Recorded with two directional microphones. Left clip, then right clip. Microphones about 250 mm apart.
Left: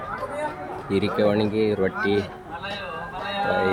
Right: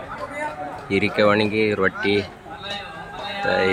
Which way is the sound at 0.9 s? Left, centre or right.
Centre.